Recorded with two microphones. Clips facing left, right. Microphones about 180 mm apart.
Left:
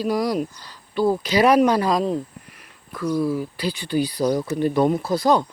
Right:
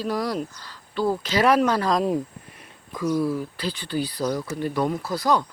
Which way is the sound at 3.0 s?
10° right (ahead or behind).